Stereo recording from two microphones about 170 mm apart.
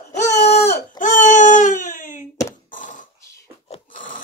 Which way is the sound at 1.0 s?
50° left (ahead or behind).